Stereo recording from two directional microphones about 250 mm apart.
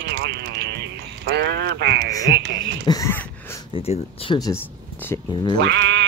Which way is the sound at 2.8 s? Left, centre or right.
Centre.